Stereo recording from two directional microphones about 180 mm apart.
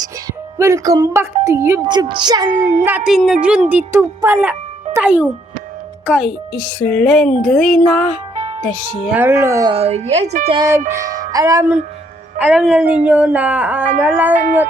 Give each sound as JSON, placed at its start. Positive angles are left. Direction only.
{"t": 0.6, "sound": "speech", "side_deg": -20}
{"t": 2.5, "sound": "a woman's voice", "side_deg": -50}
{"t": 2.8, "sound": "a child's voice", "side_deg": -5}
{"t": 9.7, "sound": "a woman's voice", "side_deg": -35}
{"t": 10.6, "sound": "speech", "side_deg": -15}
{"t": 12.4, "sound": "speech", "side_deg": -5}